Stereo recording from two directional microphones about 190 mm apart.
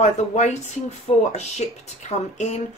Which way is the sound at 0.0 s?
35° left (ahead or behind).